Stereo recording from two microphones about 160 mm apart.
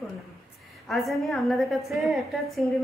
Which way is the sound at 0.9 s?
Centre (ahead or behind).